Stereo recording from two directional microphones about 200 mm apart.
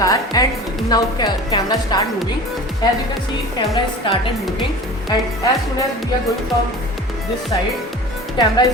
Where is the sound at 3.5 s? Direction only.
25° left (ahead or behind).